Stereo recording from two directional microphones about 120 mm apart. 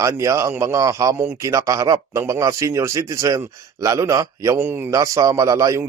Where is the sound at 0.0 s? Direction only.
25° right (ahead or behind).